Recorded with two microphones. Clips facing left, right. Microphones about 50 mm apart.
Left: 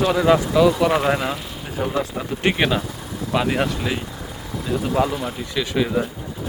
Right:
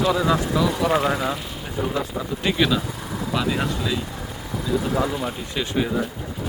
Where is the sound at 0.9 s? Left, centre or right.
Left.